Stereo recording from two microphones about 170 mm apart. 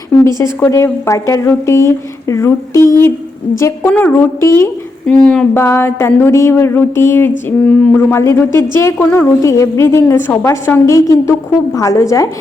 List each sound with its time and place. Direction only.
0.3 s speech: 15° left (ahead or behind)